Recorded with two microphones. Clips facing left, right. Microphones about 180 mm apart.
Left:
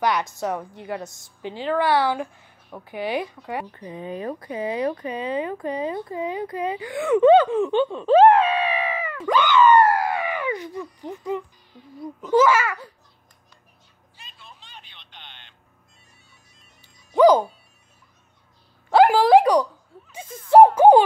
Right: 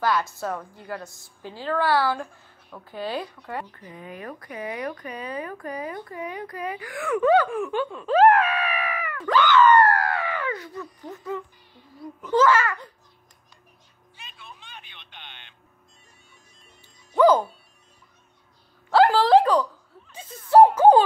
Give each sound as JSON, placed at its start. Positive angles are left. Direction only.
{"t": 0.0, "sound": "a woman's voice", "side_deg": 20}
{"t": 9.2, "sound": "a sound", "side_deg": 15}
{"t": 12.2, "sound": "a child's voice", "side_deg": 10}
{"t": 14.2, "sound": "vehicle", "side_deg": -60}
{"t": 17.1, "sound": "music", "side_deg": 15}
{"t": 18.9, "sound": "a sound", "side_deg": 15}